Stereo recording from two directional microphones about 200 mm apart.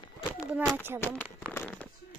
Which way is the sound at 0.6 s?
5° left (ahead or behind).